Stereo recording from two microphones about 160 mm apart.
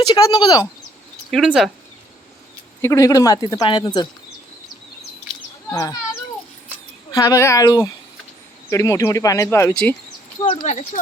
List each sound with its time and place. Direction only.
0.1 s speech: 25° left (ahead or behind)
1.3 s speech: centre (ahead or behind)
2.8 s speech: 20° left (ahead or behind)
5.7 s speech: 20° left (ahead or behind)
7.1 s speech: 20° left (ahead or behind)
10.6 s speech: 50° left (ahead or behind)